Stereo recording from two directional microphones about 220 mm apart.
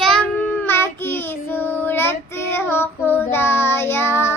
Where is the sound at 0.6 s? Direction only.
10° left (ahead or behind).